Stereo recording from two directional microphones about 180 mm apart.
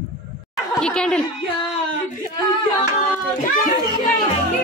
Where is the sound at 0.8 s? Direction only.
5° left (ahead or behind).